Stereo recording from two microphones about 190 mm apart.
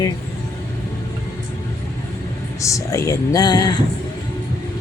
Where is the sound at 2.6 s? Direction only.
15° left (ahead or behind).